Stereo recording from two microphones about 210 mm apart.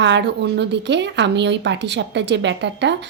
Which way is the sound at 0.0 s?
55° right (ahead or behind).